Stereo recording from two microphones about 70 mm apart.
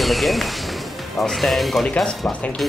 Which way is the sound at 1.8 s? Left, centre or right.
Centre.